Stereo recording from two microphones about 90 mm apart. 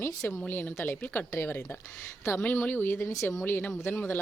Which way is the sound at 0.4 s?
20° left (ahead or behind).